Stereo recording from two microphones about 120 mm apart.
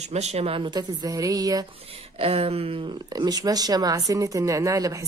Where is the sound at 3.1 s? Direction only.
35° right (ahead or behind).